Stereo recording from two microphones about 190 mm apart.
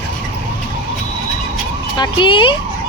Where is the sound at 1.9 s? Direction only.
25° left (ahead or behind).